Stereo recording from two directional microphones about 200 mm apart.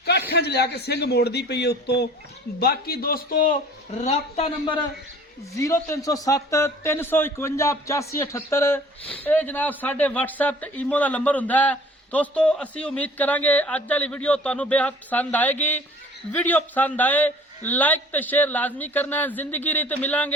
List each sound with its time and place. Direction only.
0.0 s a man's voice: 55° left (ahead or behind)
3.9 s speech: 30° left (ahead or behind); by 20.3 s 10° left (ahead or behind)